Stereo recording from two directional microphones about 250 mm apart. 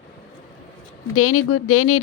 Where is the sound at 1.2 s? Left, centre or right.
Left.